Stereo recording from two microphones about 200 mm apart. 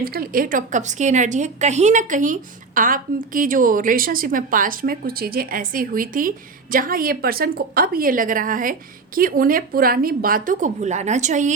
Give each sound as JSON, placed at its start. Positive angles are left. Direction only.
{"t": 0.0, "sound": "a woman's voice", "side_deg": -50}